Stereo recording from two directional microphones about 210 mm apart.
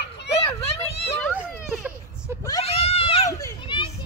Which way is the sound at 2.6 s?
30° left (ahead or behind).